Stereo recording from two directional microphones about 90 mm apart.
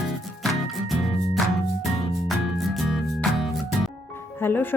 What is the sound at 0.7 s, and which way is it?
Music, centre (ahead or behind).